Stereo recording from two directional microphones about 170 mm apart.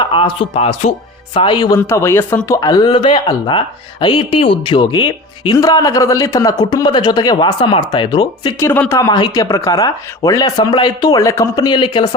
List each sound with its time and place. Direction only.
0.0 s speech: 30° left (ahead or behind)
8.5 s speech: 15° left (ahead or behind)